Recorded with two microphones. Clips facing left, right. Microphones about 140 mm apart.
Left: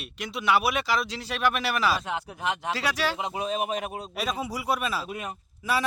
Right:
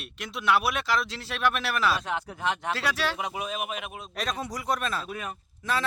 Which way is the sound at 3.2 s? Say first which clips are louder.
Left 3 dB; 25° left (ahead or behind).